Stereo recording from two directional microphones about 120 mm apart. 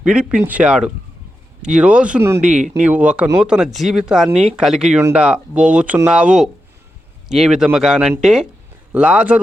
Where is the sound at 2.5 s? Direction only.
90° right.